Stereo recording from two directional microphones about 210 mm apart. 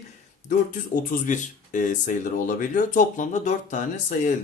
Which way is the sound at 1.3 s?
35° left (ahead or behind).